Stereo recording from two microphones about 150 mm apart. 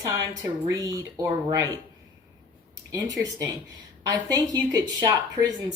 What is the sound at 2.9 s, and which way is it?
Speech, 25° right (ahead or behind).